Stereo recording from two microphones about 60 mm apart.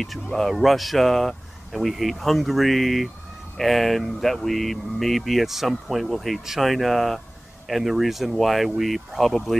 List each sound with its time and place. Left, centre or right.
0.0 s speech: centre